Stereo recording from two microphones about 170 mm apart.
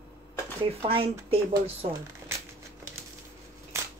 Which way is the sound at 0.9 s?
35° right (ahead or behind).